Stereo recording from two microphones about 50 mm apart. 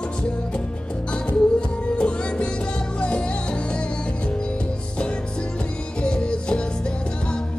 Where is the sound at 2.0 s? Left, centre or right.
Left.